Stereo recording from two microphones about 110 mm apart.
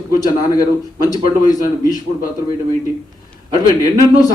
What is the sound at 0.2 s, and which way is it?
Speech, 35° left (ahead or behind).